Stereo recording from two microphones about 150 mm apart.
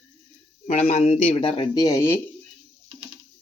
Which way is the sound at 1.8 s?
20° left (ahead or behind).